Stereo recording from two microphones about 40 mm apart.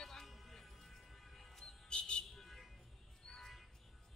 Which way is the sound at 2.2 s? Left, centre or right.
Centre.